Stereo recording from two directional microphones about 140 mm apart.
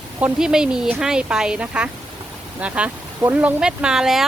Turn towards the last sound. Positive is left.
turn(degrees=-5)  # may be behind; listen again after turning